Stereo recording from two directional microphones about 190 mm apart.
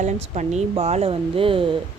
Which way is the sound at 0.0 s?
35° right (ahead or behind).